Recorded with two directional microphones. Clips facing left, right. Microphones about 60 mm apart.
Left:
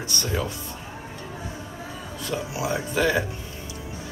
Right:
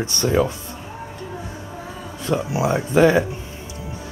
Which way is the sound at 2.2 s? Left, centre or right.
Right.